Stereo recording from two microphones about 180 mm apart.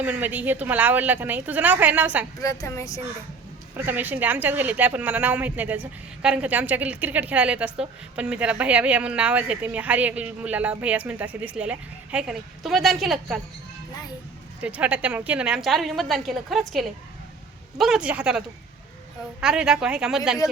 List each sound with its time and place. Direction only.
0.0 s speech: 10° right (ahead or behind)
2.4 s speech: 20° left (ahead or behind)
3.8 s speech: 10° right (ahead or behind)
14.6 s a woman's voice: 5° right (ahead or behind)